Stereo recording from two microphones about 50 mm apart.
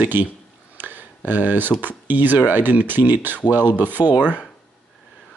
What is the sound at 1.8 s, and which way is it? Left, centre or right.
Speech, right.